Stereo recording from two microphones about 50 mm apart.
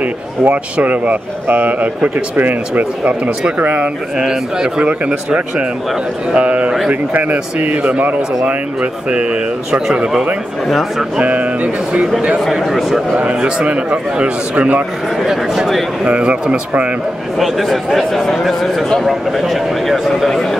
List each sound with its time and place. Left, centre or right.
0.0 s a man's voice: right
3.0 s a man's voice: right
4.2 s a man's voice: centre
6.9 s a man's voice: right
7.5 s a man's voice: right
11.1 s a man's voice: right
12.4 s a man's voice: centre
13.1 s a man's voice: right
15.2 s speech: centre
16.1 s a man's voice: right
17.4 s a man's voice: centre